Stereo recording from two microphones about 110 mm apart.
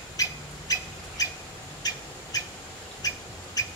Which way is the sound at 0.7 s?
35° left (ahead or behind).